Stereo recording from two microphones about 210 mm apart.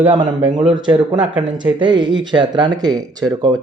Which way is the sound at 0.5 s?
25° right (ahead or behind).